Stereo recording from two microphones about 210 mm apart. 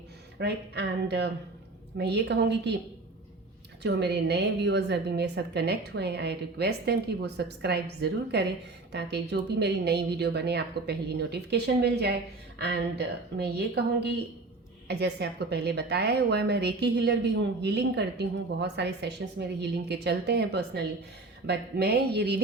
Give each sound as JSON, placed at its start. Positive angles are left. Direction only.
{"t": 0.3, "sound": "a woman's voice", "side_deg": -50}
{"t": 3.8, "sound": "a woman's voice", "side_deg": -55}